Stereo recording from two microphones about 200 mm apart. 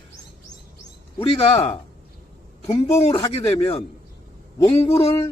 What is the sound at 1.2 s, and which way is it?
Speech, 25° left (ahead or behind).